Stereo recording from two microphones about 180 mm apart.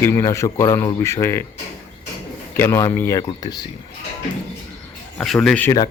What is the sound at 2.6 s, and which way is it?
Speech, 15° left (ahead or behind).